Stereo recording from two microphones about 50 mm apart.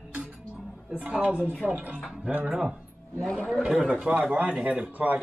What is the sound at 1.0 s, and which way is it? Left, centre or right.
Speech, right.